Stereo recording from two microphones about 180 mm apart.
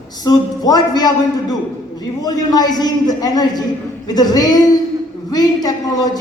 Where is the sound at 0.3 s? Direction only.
20° left (ahead or behind).